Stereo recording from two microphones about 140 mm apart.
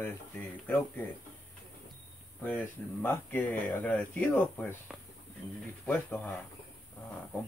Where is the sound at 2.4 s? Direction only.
15° left (ahead or behind).